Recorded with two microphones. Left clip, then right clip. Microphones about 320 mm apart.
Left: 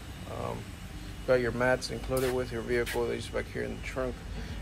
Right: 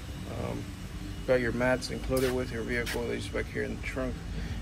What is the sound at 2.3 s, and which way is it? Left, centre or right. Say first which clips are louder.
Speech: left 1 dB; left.